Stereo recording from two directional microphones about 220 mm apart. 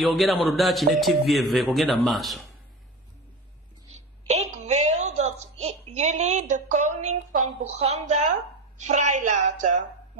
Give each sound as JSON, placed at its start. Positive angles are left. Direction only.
{"t": 0.0, "sound": "speech", "side_deg": 0}
{"t": 4.3, "sound": "a sound", "side_deg": -30}
{"t": 6.5, "sound": "a woman's voice", "side_deg": -35}